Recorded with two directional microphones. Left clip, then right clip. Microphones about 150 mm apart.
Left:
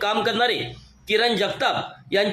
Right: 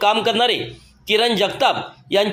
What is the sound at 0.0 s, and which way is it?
A man's voice, 20° right (ahead or behind).